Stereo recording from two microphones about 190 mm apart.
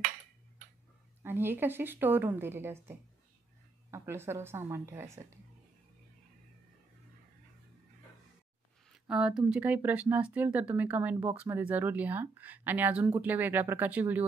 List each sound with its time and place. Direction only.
1.2 s speech: 10° right (ahead or behind)
8.9 s speech: 5° right (ahead or behind)